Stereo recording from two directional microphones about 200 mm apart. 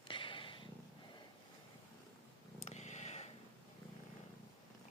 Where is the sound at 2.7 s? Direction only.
35° left (ahead or behind).